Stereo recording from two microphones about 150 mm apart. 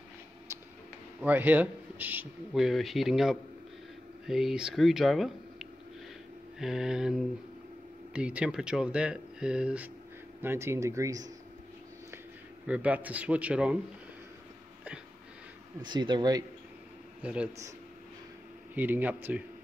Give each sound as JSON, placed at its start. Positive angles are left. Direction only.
{"t": 1.2, "sound": "speech", "side_deg": -10}
{"t": 12.6, "sound": "speech", "side_deg": -10}
{"t": 15.8, "sound": "speech", "side_deg": -30}
{"t": 17.2, "sound": "speech", "side_deg": -10}
{"t": 18.8, "sound": "speech", "side_deg": -10}